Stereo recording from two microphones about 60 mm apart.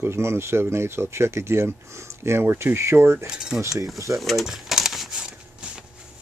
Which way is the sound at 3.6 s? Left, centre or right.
Right.